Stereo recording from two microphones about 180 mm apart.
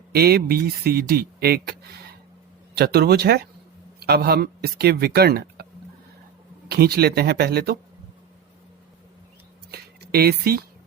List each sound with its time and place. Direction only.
0.1 s speech: 60° right (ahead or behind)
6.7 s speech: 60° right (ahead or behind)
9.7 s a sound: 60° right (ahead or behind)